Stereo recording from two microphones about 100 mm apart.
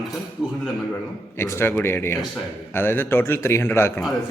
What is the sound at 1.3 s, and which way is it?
A man's voice, 25° left (ahead or behind).